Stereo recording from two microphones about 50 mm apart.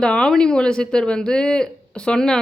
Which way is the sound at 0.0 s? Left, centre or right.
Centre.